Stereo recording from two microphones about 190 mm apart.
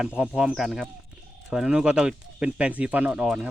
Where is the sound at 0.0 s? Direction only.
5° right (ahead or behind).